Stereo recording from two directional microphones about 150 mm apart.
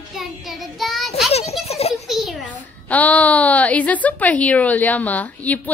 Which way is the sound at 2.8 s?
10° left (ahead or behind).